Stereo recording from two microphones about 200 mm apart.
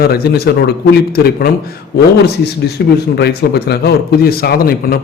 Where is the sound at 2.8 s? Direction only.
55° left (ahead or behind).